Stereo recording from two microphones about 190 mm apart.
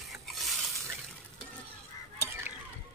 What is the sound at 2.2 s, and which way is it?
Stir, 10° right (ahead or behind).